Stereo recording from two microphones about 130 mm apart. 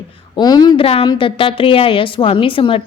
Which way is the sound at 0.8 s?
50° left (ahead or behind).